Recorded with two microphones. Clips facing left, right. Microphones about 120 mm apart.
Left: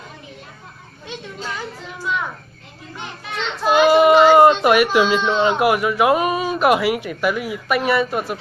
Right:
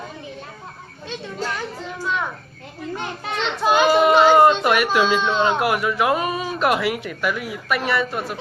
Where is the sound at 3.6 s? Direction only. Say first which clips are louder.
Left 2 dB; centre (ahead or behind).